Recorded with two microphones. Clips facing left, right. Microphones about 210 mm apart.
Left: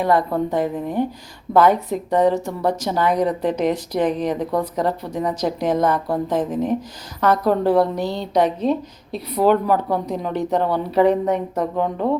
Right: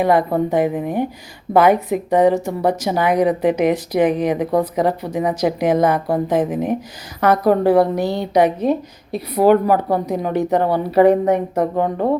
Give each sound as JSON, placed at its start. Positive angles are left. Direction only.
{"t": 0.0, "sound": "speech", "side_deg": -15}
{"t": 11.0, "sound": "a woman's voice", "side_deg": -55}